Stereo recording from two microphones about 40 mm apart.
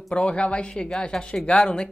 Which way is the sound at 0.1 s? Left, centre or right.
Left.